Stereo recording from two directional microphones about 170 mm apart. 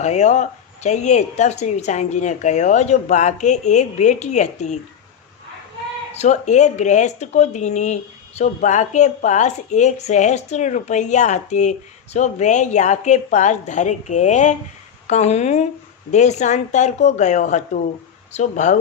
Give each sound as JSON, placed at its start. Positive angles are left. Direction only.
{"t": 0.0, "sound": "a woman's voice", "side_deg": 45}
{"t": 6.1, "sound": "a woman's voice", "side_deg": 45}